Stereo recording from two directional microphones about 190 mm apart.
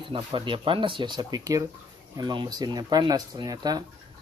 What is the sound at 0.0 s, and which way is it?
Speech, 25° right (ahead or behind).